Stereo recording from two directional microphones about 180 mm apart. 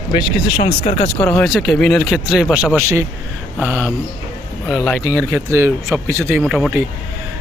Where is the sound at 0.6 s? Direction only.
35° left (ahead or behind).